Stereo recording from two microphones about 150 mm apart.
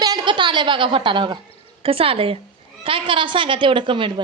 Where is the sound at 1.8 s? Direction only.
40° right (ahead or behind).